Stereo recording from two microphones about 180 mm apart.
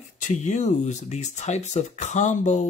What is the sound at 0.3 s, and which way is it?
Speech, 40° left (ahead or behind).